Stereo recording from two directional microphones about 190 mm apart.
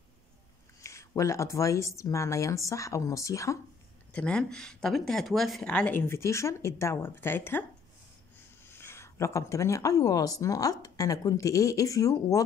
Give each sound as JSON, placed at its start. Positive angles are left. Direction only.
{"t": 0.8, "sound": "speech", "side_deg": 15}
{"t": 4.1, "sound": "speech", "side_deg": 5}
{"t": 8.7, "sound": "speech", "side_deg": 15}